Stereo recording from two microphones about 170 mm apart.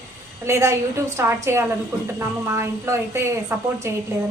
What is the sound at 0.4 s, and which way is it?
A woman's voice, 15° right (ahead or behind).